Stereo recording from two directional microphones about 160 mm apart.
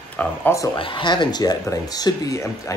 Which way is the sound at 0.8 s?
30° left (ahead or behind).